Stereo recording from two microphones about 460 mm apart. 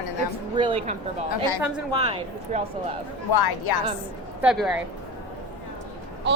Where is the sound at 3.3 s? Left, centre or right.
Left.